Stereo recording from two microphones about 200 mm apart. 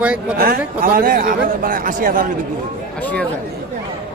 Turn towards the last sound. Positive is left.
turn(degrees=5)  # may be behind; listen again after turning